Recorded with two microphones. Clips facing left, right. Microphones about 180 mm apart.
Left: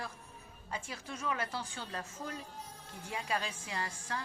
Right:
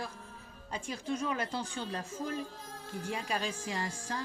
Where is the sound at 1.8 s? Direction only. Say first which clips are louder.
Right 5 dB; 90° right.